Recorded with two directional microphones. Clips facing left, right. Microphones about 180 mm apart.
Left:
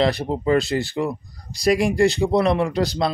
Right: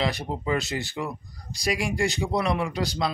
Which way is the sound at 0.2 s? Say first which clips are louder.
Left 8 dB; 35° left (ahead or behind).